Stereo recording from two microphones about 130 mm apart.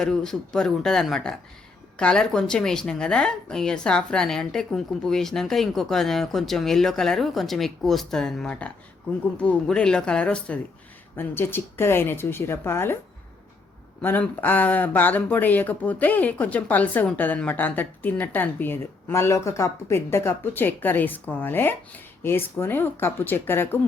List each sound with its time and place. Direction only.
0.0 s speech: 5° left (ahead or behind)
14.0 s speech: 15° left (ahead or behind)